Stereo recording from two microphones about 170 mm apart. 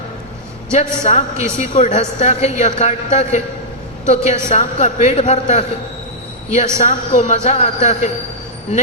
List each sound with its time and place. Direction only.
0.7 s a woman's voice: 45° left (ahead or behind)
6.7 s a woman's voice: 45° left (ahead or behind)